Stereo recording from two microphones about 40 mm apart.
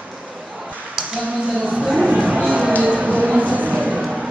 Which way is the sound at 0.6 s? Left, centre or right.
Centre.